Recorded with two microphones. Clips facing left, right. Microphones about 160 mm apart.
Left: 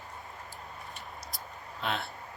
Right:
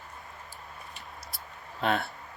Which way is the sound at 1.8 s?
55° right (ahead or behind).